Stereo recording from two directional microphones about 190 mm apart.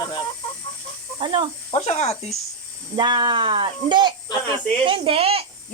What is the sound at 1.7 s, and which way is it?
Speech, 35° left (ahead or behind).